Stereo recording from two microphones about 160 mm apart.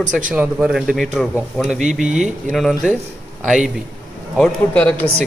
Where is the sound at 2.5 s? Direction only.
Centre (ahead or behind).